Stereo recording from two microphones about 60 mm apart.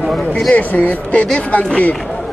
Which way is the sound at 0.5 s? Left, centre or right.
Left.